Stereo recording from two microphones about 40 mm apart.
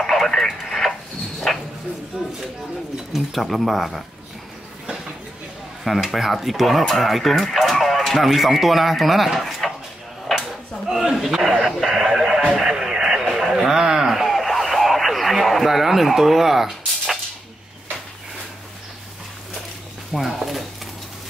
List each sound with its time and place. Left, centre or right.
0.0 s radio: centre
1.5 s bow-wow: centre
2.1 s speech: right
3.1 s speech: centre
5.9 s speech: centre
10.3 s a sound: centre
10.9 s a sound: centre
11.1 s chuckle: centre
11.5 s a sound: centre
12.4 s radio: centre
12.6 s radio: centre
20.2 s speech: centre